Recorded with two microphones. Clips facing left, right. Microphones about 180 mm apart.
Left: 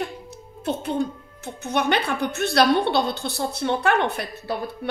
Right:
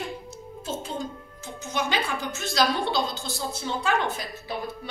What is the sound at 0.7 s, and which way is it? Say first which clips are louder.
Speech: left 8 dB; 60° left (ahead or behind).